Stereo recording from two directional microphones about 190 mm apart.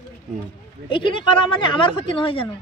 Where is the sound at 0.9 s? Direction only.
25° left (ahead or behind).